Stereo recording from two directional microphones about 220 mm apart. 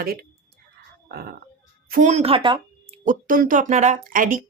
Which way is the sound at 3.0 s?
40° right (ahead or behind).